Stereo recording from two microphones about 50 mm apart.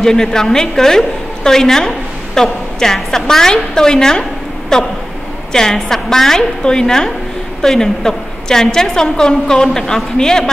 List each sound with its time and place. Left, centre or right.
0.0 s a woman's voice: centre